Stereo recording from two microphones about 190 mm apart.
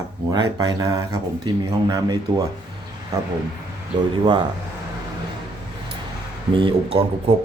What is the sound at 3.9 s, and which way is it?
Speech, 25° right (ahead or behind).